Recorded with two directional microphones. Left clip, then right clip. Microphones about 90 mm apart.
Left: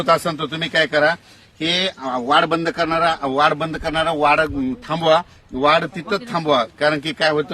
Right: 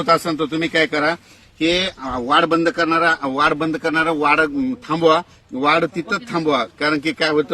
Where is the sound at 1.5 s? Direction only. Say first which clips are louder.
Right 1 dB; 25° left (ahead or behind).